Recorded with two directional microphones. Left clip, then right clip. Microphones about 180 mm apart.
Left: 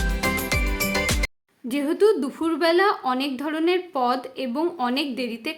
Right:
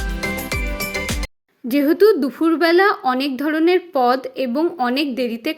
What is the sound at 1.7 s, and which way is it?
A woman's voice, 25° right (ahead or behind).